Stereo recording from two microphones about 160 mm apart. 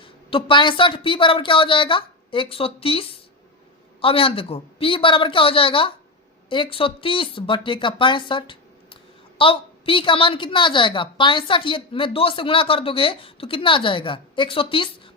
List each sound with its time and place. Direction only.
0.0 s a woman's voice: 30° left (ahead or behind)